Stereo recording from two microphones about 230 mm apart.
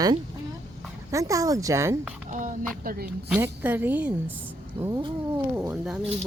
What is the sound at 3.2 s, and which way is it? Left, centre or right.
Speech, centre.